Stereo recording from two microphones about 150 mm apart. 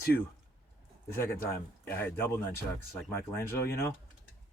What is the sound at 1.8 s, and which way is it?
Speech, 15° left (ahead or behind).